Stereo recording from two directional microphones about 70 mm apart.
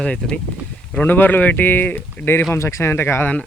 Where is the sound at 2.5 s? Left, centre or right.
Left.